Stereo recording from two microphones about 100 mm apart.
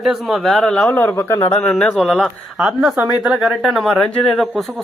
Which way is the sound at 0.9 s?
20° left (ahead or behind).